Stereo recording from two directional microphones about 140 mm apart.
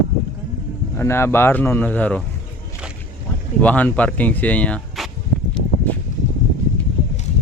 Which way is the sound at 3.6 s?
10° left (ahead or behind).